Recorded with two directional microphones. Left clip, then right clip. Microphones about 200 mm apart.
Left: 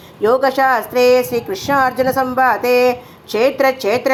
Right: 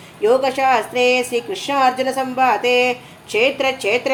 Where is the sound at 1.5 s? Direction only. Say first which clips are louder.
Left 4 dB; 20° left (ahead or behind).